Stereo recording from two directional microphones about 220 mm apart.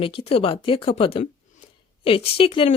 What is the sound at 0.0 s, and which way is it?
Speech, 25° left (ahead or behind).